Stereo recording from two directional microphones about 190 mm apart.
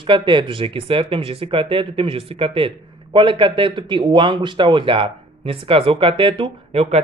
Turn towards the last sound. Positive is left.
turn(degrees=-30)  # may be behind; listen again after turning